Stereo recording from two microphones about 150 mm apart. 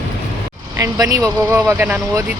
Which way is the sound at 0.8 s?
20° right (ahead or behind).